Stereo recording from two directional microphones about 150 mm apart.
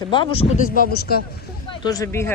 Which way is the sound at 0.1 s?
35° left (ahead or behind).